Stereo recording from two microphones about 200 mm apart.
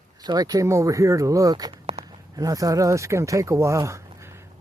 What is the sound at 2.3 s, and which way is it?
Speech, 15° right (ahead or behind).